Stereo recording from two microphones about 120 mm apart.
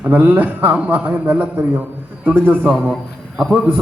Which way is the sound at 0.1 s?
15° right (ahead or behind).